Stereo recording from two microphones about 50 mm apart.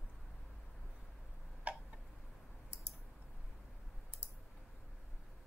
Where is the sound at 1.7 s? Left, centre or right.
Right.